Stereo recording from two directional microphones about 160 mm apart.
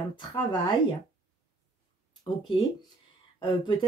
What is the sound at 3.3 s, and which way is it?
Speech, 30° left (ahead or behind).